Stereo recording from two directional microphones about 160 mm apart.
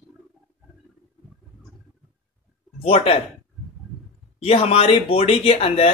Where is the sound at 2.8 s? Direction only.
35° left (ahead or behind).